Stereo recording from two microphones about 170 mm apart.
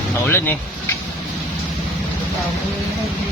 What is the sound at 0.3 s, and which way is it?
Speech, 15° left (ahead or behind).